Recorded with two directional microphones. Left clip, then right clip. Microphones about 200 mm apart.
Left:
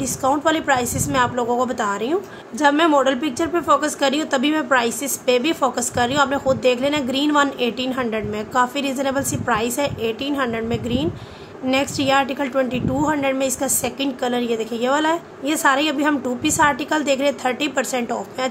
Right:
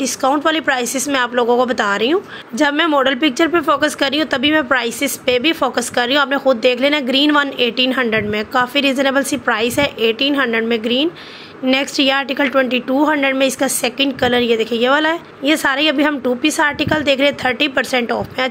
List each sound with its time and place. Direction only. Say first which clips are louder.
0.0 s a woman's voice: right 3 dB; 15° right (ahead or behind)